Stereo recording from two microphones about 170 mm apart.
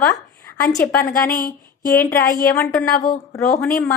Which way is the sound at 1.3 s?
55° left (ahead or behind).